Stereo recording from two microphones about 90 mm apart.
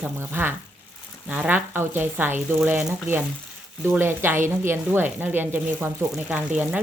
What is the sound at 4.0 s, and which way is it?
Speech, 25° right (ahead or behind).